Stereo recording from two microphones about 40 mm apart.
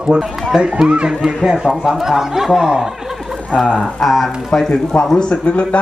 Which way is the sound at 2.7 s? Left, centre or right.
Centre.